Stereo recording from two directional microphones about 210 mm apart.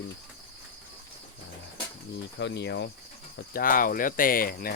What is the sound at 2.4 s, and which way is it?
Speech, 55° left (ahead or behind).